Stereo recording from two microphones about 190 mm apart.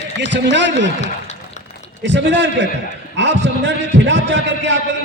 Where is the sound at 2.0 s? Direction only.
65° right (ahead or behind).